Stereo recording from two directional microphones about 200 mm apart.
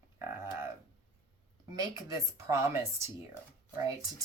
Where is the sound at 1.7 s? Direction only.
15° right (ahead or behind).